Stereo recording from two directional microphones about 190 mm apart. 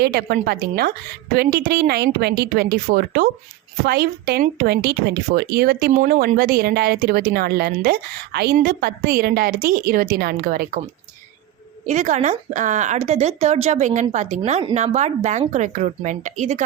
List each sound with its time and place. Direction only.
0.0 s speech: 55° right (ahead or behind)
11.9 s a woman's voice: 40° right (ahead or behind)